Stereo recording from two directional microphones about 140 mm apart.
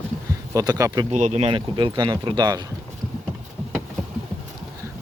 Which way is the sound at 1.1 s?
55° right (ahead or behind).